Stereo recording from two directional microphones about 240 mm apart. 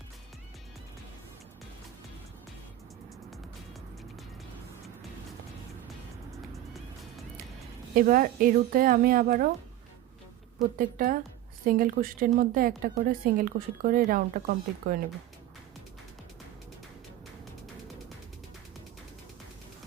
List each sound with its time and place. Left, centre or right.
7.9 s speech: right
10.8 s speech: right